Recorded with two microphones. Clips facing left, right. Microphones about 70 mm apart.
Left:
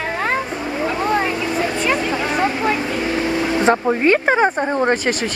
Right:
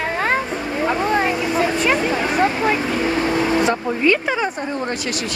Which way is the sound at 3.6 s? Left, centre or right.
Left.